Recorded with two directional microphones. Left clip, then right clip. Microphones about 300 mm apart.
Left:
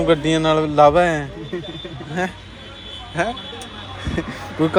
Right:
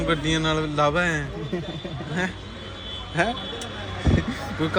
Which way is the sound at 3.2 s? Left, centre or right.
Centre.